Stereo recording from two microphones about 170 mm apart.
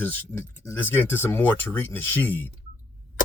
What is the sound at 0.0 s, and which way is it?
Speech, 10° left (ahead or behind).